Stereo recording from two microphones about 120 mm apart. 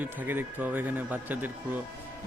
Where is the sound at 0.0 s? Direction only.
15° right (ahead or behind).